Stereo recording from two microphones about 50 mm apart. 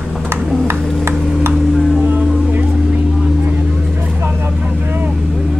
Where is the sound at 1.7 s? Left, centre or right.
Centre.